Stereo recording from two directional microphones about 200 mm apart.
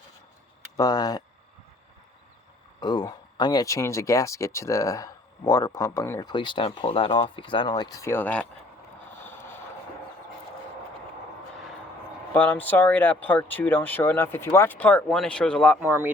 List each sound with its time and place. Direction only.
0.8 s speech: 20° left (ahead or behind)
2.8 s speech: 20° left (ahead or behind)
12.3 s speech: 10° left (ahead or behind)
15.9 s speech: 10° right (ahead or behind)